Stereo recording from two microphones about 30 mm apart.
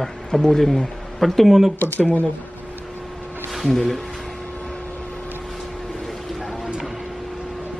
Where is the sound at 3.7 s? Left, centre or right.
Centre.